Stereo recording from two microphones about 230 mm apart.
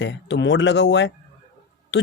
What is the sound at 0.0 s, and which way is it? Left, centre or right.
A man's voice, left.